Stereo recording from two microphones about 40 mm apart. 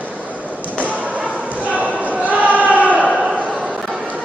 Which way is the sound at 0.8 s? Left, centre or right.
Right.